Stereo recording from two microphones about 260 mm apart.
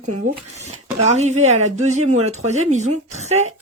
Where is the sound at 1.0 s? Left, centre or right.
Right.